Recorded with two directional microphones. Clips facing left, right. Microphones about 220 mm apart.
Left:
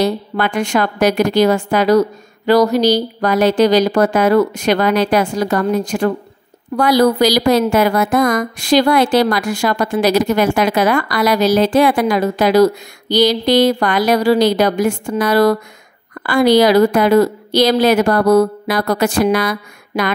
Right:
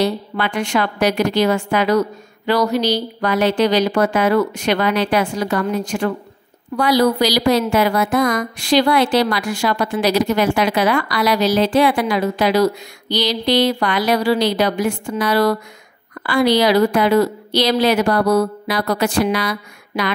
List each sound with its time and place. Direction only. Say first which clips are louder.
0.0 s a woman's voice: left 3 dB; 45° left (ahead or behind)